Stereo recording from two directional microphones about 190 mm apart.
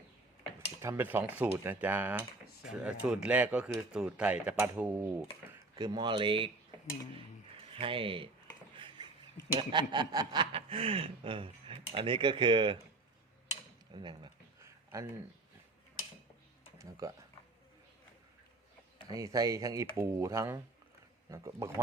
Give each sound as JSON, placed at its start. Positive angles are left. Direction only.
{"t": 0.8, "sound": "speech", "side_deg": -10}
{"t": 5.7, "sound": "speech", "side_deg": -20}
{"t": 7.7, "sound": "speech", "side_deg": -30}
{"t": 8.7, "sound": "a sound", "side_deg": -25}
{"t": 9.6, "sound": "speech", "side_deg": -25}
{"t": 13.9, "sound": "speech", "side_deg": -25}
{"t": 16.7, "sound": "speech", "side_deg": -15}
{"t": 19.0, "sound": "speech", "side_deg": -20}